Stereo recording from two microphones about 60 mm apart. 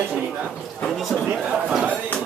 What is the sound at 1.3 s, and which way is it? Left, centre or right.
Speech, centre.